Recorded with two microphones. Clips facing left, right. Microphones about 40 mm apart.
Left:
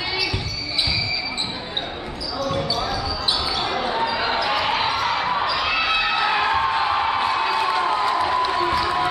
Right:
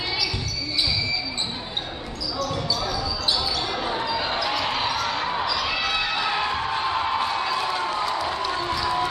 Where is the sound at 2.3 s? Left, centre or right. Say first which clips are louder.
Left 3 dB; centre.